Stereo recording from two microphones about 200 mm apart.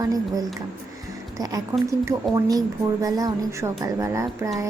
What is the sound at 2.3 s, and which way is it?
A woman's voice, 20° right (ahead or behind).